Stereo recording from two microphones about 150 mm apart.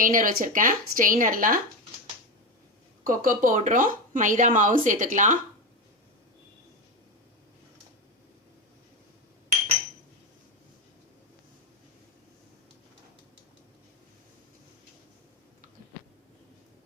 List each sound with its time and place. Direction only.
0.0 s speech: 65° right (ahead or behind)
3.0 s speech: 70° right (ahead or behind)